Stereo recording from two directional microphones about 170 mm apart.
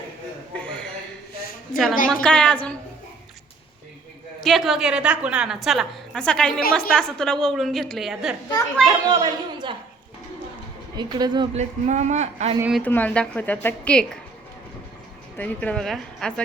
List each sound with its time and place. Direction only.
0.5 s a sound: 5° left (ahead or behind)
1.7 s a woman's voice: centre (ahead or behind)
4.4 s a woman's voice: centre (ahead or behind)
8.9 s a woman's voice: 20° right (ahead or behind)
10.9 s speech: 25° right (ahead or behind)
11.5 s speech: 45° right (ahead or behind)
12.8 s a woman's voice: 10° left (ahead or behind)
15.4 s a woman's voice: 5° left (ahead or behind)